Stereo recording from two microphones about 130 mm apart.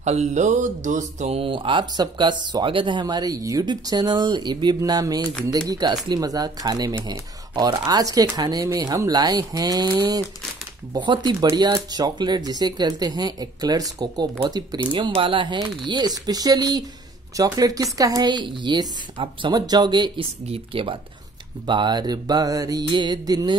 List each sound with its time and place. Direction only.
0.0 s speech: 60° right (ahead or behind); by 20.2 s 35° right (ahead or behind)
20.4 s speech: 45° right (ahead or behind)